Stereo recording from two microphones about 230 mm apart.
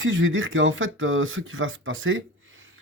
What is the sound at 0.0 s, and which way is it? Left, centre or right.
Speech, right.